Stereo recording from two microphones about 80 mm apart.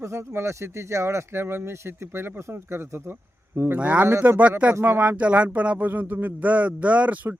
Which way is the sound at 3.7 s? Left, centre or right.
Centre.